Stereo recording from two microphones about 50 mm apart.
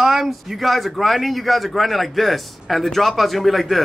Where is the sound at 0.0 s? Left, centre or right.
Centre.